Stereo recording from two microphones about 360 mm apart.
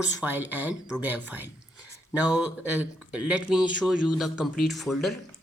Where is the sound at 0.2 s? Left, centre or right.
Centre.